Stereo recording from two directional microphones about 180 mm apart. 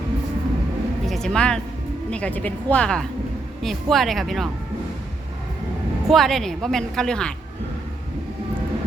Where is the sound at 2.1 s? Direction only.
5° left (ahead or behind).